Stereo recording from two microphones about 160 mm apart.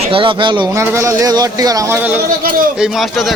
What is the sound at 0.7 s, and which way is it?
Speech, 15° right (ahead or behind).